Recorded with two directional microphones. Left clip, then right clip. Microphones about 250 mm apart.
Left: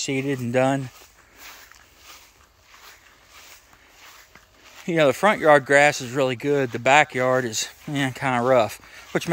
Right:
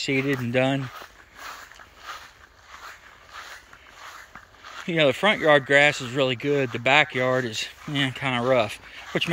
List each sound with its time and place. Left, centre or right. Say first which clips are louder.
0.0 s speech: right 1 dB; centre
0.9 s walk: right 7 dB; centre
4.8 s speech: left 2 dB; centre